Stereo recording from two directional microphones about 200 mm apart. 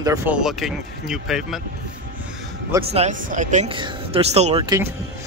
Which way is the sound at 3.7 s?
25° right (ahead or behind).